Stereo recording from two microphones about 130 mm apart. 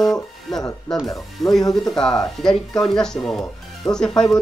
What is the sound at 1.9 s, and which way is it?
Speech, 5° left (ahead or behind).